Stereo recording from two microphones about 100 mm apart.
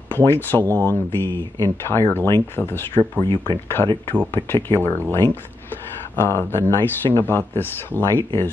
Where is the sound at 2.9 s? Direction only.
50° right (ahead or behind).